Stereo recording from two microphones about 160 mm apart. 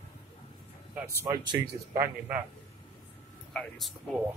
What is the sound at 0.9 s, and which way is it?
Speech, 10° right (ahead or behind).